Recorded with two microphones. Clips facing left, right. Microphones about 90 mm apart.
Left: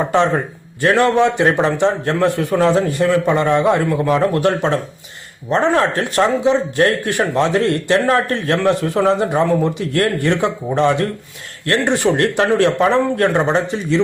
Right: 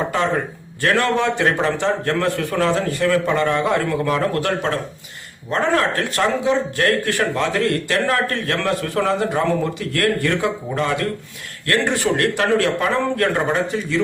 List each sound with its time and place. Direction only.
0.8 s a man's voice: 20° left (ahead or behind)